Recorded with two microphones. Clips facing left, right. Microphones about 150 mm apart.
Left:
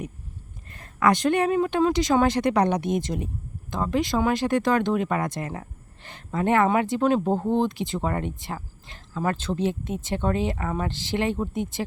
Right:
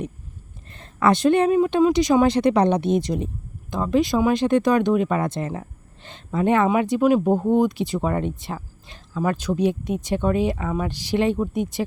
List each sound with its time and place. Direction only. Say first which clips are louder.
0.7 s a sound: right 2 dB; 30° right (ahead or behind)
1.3 s speech: right 4 dB; 20° right (ahead or behind)
7.6 s speech: right 4 dB; 20° left (ahead or behind)
8.0 s speech: right 3 dB; 20° right (ahead or behind)
8.5 s a sound: right 2 dB; 15° right (ahead or behind)
9.6 s speech: right 5 dB; 15° right (ahead or behind)